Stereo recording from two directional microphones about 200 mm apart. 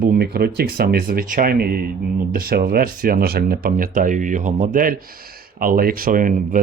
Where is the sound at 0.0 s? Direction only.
50° right (ahead or behind).